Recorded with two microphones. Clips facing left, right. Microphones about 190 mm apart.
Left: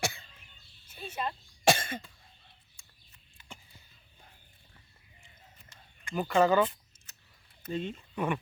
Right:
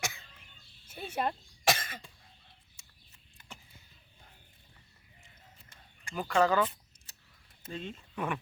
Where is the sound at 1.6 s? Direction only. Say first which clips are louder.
Left 5 dB; 30° left (ahead or behind).